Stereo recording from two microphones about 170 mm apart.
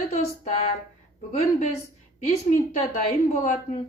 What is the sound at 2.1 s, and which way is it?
A woman's voice, 45° left (ahead or behind).